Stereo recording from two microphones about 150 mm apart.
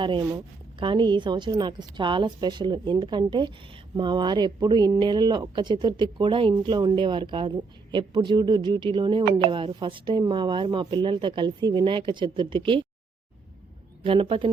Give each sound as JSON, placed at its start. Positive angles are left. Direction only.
{"t": 0.0, "sound": "speech", "side_deg": -30}
{"t": 14.0, "sound": "speech", "side_deg": -35}